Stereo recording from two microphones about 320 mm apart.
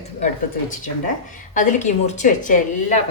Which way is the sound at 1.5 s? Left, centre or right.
Left.